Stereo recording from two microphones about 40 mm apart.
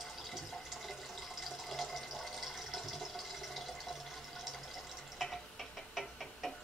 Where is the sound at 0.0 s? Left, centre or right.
Centre.